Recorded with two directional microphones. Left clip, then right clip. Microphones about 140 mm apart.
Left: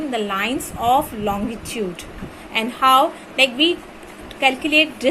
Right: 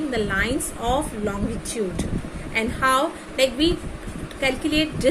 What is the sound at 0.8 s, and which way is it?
Speech, 70° left (ahead or behind).